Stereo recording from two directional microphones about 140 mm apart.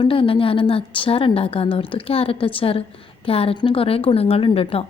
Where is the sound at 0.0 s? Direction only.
40° left (ahead or behind).